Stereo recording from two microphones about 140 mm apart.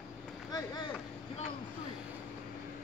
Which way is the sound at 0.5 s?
30° left (ahead or behind).